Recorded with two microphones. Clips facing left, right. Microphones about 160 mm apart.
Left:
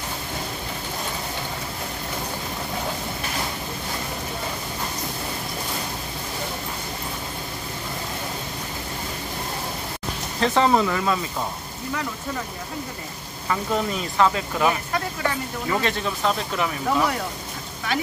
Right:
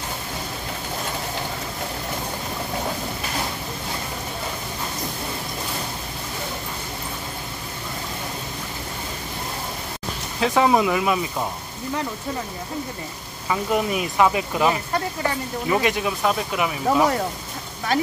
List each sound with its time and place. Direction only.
10.4 s speech: 10° right (ahead or behind)
13.5 s speech: 15° right (ahead or behind)
16.8 s speech: 40° right (ahead or behind)